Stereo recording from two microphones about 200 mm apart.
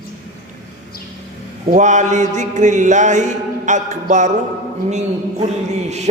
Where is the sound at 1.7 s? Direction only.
35° right (ahead or behind).